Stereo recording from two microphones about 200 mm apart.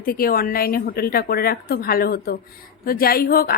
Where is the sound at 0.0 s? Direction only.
45° left (ahead or behind).